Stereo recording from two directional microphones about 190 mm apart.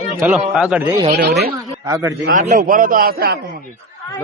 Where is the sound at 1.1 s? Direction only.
60° right (ahead or behind).